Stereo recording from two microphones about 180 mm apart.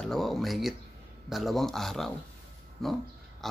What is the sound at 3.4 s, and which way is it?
Pig, centre (ahead or behind).